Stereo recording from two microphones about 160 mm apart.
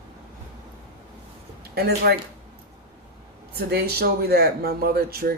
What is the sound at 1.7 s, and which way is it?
Speech, 80° right.